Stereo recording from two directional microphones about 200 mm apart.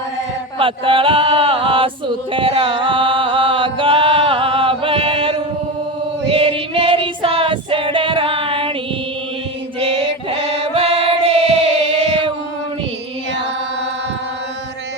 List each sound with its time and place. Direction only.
0.6 s male singing: 25° right (ahead or behind)
6.2 s female singing: 30° right (ahead or behind)
9.8 s choir: 25° right (ahead or behind)